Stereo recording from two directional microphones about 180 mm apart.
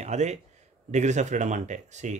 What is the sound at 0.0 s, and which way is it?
Speech, 40° right (ahead or behind).